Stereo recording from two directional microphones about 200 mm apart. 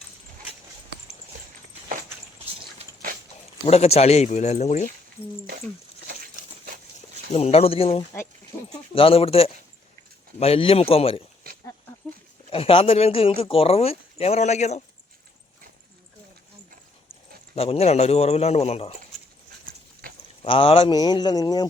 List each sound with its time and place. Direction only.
3.7 s speech: 30° left (ahead or behind)
7.3 s speech: 30° left (ahead or behind)
12.5 s speech: 30° left (ahead or behind)
17.5 s speech: 30° left (ahead or behind)
20.4 s speech: 25° left (ahead or behind)